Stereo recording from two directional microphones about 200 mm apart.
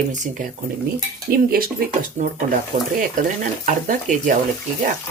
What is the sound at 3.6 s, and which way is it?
Speech, 40° right (ahead or behind).